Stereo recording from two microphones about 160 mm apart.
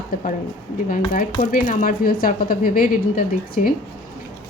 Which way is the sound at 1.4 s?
60° left (ahead or behind).